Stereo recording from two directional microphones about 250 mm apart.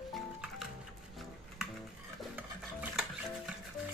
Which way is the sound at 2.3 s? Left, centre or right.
Centre.